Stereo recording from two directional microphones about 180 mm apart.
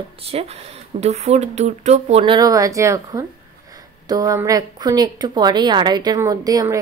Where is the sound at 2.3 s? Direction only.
20° right (ahead or behind).